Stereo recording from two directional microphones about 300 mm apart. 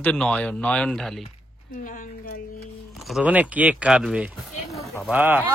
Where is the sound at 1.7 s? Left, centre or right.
Left.